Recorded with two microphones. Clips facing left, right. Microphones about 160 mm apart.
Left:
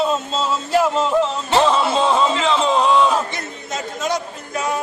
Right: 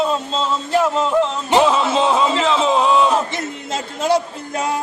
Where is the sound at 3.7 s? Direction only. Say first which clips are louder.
Right 4 dB; 30° right (ahead or behind).